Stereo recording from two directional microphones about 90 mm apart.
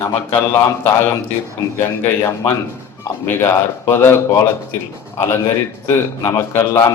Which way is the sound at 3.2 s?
25° left (ahead or behind).